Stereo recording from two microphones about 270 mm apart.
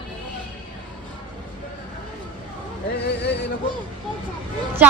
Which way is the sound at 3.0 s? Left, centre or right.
Left.